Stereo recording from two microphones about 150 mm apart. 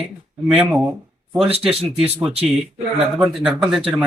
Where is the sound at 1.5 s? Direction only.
40° right (ahead or behind).